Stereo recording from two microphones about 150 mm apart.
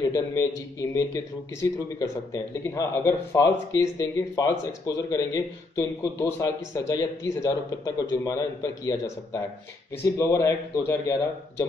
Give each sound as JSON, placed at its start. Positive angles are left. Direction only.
{"t": 0.0, "sound": "a man's voice", "side_deg": 25}